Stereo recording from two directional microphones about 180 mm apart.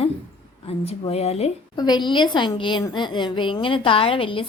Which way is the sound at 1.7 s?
25° left (ahead or behind).